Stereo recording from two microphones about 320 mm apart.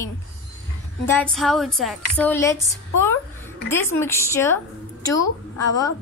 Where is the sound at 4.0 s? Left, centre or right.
Centre.